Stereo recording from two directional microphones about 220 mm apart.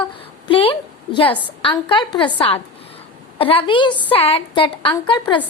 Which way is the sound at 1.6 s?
20° left (ahead or behind).